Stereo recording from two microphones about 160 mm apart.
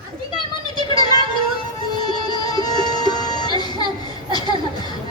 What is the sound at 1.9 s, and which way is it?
Music, 25° left (ahead or behind).